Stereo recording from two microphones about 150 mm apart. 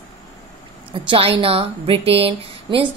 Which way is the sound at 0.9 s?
35° right (ahead or behind).